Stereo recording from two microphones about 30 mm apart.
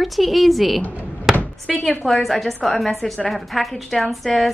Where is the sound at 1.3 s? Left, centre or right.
Left.